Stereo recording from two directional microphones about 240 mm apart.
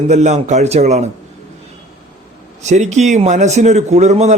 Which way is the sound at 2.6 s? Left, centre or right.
Right.